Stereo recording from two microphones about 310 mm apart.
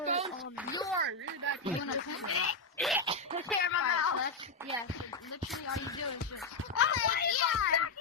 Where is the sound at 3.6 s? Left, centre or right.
Left.